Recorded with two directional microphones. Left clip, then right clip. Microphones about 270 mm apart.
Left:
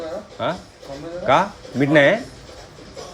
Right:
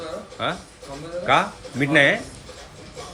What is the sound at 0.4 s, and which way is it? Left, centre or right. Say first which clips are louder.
Speech: left 2 dB; centre.